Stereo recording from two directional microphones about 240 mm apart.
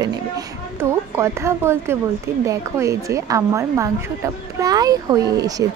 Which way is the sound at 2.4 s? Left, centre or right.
Centre.